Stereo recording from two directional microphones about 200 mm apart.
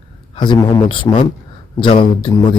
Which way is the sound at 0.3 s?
20° left (ahead or behind).